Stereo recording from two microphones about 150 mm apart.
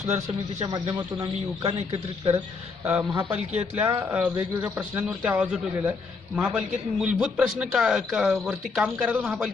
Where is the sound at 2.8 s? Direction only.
10° right (ahead or behind).